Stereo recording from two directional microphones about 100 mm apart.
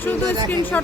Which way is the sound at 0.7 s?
15° left (ahead or behind).